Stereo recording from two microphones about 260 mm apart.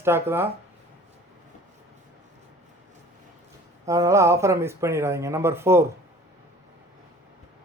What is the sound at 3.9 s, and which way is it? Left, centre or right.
Speech, centre.